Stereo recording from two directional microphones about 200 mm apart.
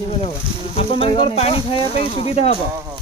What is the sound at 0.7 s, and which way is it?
Speech, 30° left (ahead or behind).